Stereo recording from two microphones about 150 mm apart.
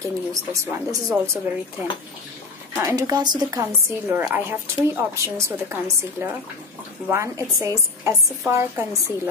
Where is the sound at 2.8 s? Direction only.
20° right (ahead or behind).